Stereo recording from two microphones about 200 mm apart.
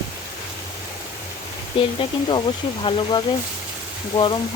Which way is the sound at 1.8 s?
25° left (ahead or behind).